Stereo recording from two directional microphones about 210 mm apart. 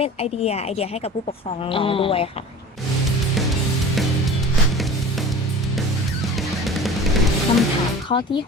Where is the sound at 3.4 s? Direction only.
Centre (ahead or behind).